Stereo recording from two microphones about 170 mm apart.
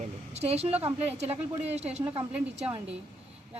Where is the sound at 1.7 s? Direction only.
40° right (ahead or behind).